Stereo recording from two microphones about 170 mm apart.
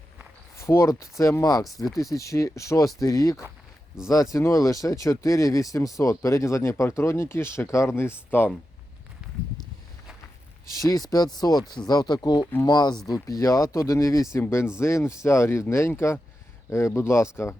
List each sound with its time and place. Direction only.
0.5 s speech: 15° left (ahead or behind)
10.8 s speech: 20° left (ahead or behind)